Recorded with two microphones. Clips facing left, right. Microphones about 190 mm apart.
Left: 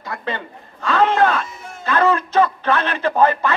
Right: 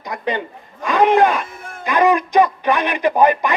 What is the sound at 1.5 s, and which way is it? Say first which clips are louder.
Music: right 2 dB; 55° right (ahead or behind).